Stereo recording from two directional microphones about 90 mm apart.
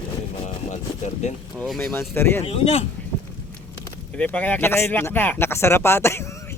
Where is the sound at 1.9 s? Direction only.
25° left (ahead or behind).